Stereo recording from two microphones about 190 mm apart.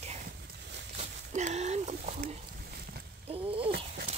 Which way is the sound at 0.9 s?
40° right (ahead or behind).